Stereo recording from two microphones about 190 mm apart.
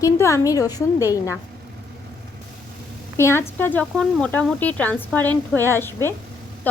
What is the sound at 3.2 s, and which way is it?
A woman's voice, 15° left (ahead or behind).